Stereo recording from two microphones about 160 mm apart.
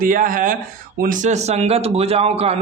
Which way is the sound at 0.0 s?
60° right (ahead or behind).